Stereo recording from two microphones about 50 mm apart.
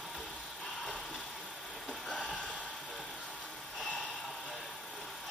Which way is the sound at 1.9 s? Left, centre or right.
Centre.